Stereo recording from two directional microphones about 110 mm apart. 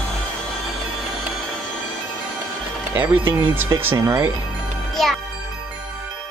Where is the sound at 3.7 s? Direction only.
25° right (ahead or behind).